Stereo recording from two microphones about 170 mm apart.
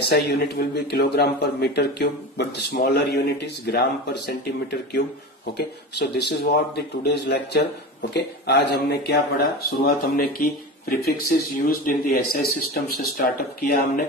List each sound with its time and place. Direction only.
0.0 s speech: 75° left (ahead or behind); by 14.0 s 60° left (ahead or behind)